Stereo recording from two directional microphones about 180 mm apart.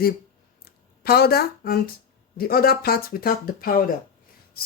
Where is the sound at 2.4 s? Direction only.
55° left (ahead or behind).